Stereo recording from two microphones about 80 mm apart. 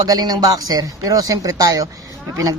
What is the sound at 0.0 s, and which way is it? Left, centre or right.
Speech, right.